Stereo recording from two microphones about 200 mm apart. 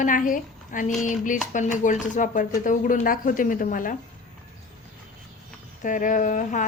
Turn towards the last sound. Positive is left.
turn(degrees=40)  # may be behind; listen again after turning